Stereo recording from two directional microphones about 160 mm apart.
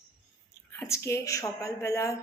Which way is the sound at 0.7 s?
15° left (ahead or behind).